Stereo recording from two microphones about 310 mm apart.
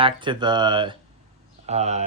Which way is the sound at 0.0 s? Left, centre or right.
Centre.